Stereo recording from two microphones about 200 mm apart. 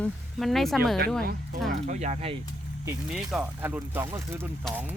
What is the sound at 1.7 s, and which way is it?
Speech, 35° right (ahead or behind).